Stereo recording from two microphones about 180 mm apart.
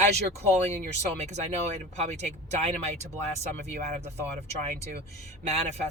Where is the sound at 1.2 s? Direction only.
40° right (ahead or behind).